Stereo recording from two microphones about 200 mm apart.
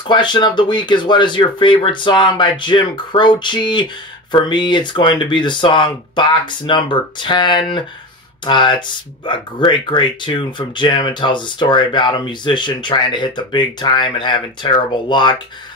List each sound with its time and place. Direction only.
0.1 s speech: 25° left (ahead or behind)